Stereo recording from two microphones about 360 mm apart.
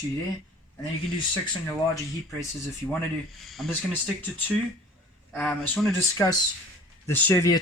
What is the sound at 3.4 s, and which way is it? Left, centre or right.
Speech, centre.